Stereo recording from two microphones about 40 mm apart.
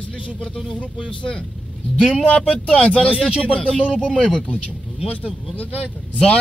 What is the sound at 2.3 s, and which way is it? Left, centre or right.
Speech, left.